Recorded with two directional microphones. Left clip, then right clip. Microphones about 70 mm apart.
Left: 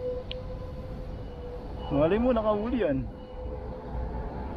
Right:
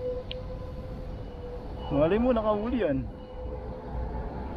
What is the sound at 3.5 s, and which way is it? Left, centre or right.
Music, right.